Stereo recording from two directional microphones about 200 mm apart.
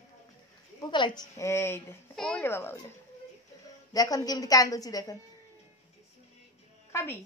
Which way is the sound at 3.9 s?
20° left (ahead or behind).